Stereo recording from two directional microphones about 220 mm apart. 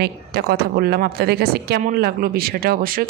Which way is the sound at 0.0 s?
45° right (ahead or behind).